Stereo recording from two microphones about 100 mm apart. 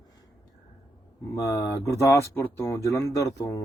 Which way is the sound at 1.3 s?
35° left (ahead or behind).